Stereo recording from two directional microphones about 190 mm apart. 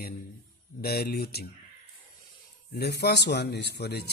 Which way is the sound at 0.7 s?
55° left (ahead or behind).